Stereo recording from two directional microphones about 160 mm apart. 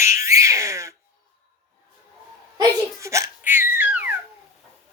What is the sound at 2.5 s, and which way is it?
Laughter, 20° right (ahead or behind).